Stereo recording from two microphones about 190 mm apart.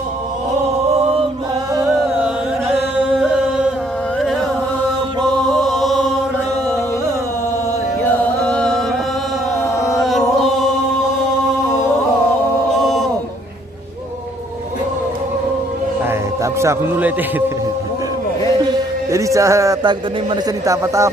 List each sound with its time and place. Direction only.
5.5 s chant: centre (ahead or behind)
8.0 s chant: 5° left (ahead or behind)
10.0 s chant: centre (ahead or behind)
12.8 s a sound: centre (ahead or behind)
16.0 s music: 15° right (ahead or behind)
18.6 s a man's voice: 20° right (ahead or behind)